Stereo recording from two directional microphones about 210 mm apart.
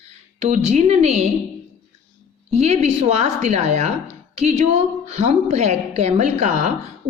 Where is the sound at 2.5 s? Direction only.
30° right (ahead or behind).